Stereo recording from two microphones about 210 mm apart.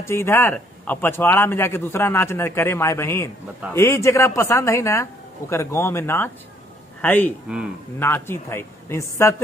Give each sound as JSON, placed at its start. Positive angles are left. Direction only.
{"t": 0.0, "sound": "a man's voice", "side_deg": 10}
{"t": 7.4, "sound": "speech", "side_deg": -5}
{"t": 8.0, "sound": "a man's voice", "side_deg": 10}